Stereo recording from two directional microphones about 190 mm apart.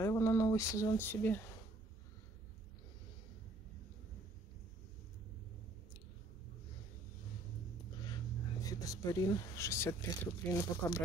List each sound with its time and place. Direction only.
0.0 s speech: 15° left (ahead or behind)
8.6 s speech: 20° left (ahead or behind)